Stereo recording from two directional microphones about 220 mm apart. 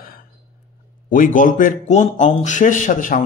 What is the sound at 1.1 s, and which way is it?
Speech, 35° left (ahead or behind).